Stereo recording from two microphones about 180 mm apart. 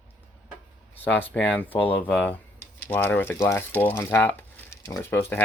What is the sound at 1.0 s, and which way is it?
Speech, 10° left (ahead or behind).